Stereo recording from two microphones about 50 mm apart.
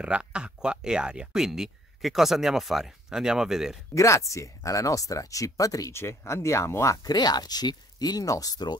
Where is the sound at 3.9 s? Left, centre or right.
Left.